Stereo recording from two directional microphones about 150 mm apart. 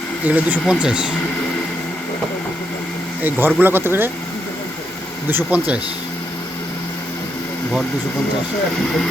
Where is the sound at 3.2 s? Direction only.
15° right (ahead or behind).